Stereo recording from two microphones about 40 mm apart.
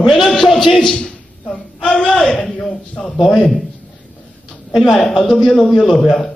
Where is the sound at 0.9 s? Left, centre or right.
Left.